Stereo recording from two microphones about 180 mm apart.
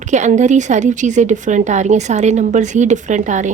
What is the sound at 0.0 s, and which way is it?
Speech, 40° right (ahead or behind).